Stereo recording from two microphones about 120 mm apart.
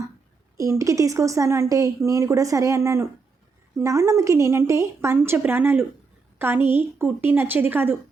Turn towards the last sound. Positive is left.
turn(degrees=-15)  # may be behind; listen again after turning